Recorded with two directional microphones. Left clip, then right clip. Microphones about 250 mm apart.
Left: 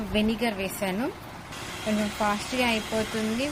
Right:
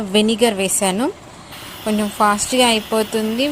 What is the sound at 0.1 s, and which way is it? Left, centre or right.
A woman's voice, right.